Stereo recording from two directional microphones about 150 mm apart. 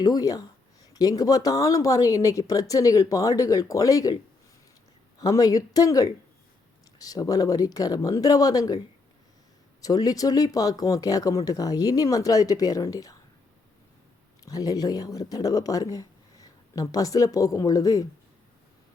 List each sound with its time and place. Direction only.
0.0 s speech: 25° left (ahead or behind)
5.2 s speech: 20° left (ahead or behind)
9.8 s speech: 25° left (ahead or behind)
14.4 s speech: 25° left (ahead or behind)